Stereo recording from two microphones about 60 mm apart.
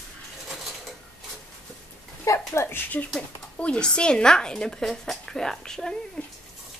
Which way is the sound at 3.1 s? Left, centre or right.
Centre.